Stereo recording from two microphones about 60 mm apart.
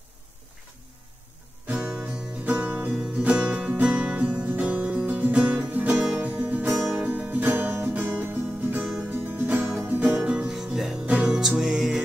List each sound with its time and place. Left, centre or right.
1.7 s music: right
6.8 s music: centre
7.2 s music: right
10.0 s music: centre